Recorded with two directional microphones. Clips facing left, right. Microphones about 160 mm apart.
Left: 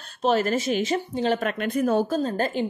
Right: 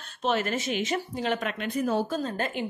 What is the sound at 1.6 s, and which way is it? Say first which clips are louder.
Speech: left 5 dB; 55° left (ahead or behind).